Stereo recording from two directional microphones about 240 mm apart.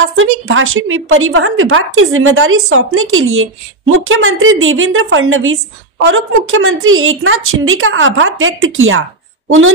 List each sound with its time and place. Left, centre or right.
0.0 s a woman's voice: right